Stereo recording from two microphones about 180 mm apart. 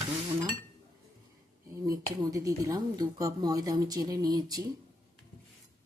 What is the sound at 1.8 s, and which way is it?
Speech, 20° right (ahead or behind).